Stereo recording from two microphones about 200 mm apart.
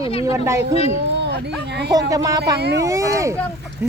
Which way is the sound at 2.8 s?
15° right (ahead or behind).